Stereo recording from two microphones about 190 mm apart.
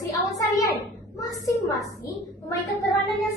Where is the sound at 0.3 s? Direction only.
15° left (ahead or behind).